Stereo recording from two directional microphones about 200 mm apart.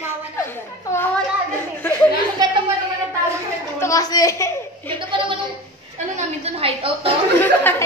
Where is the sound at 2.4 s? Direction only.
20° right (ahead or behind).